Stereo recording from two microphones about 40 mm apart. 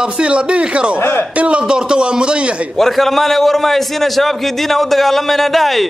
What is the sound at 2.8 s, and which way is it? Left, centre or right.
A man's voice, centre.